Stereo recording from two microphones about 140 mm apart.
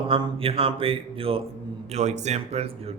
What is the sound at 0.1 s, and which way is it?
Speech, 40° right (ahead or behind).